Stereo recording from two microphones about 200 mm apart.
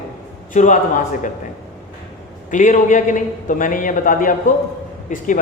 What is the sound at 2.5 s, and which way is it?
A man's voice, 40° left (ahead or behind).